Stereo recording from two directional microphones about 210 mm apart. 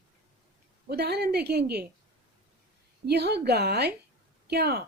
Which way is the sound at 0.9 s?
50° right (ahead or behind).